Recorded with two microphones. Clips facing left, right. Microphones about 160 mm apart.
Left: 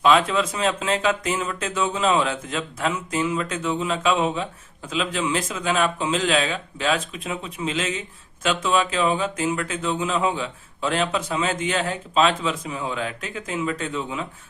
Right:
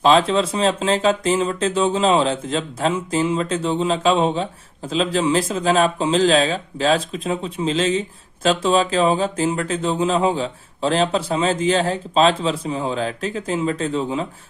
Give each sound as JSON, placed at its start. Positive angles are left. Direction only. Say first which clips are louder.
{"t": 0.0, "sound": "speech", "louder": "right 3 dB", "side_deg": -30}